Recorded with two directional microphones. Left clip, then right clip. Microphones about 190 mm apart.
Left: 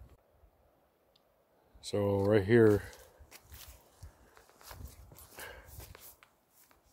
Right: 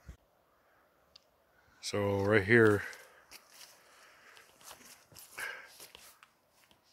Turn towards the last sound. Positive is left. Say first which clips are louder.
# right 7 dB
turn(degrees=20)  # may be behind; listen again after turning